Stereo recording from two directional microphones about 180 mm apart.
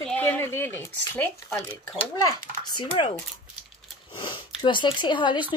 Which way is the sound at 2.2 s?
25° left (ahead or behind).